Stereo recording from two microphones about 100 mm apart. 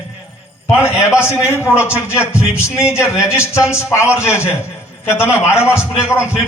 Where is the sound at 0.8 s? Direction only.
25° left (ahead or behind).